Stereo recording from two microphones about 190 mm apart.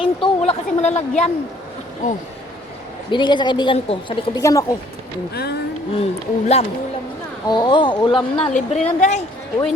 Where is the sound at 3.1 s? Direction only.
25° left (ahead or behind).